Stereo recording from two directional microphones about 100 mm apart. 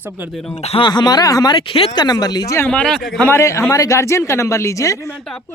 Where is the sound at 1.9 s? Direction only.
40° left (ahead or behind).